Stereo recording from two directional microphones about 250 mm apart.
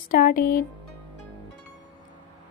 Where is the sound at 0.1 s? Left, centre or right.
Left.